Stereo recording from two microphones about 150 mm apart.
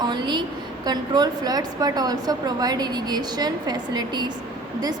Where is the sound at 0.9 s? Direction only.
25° right (ahead or behind).